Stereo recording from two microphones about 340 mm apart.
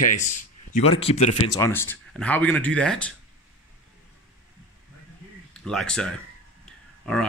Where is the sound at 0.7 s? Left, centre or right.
Centre.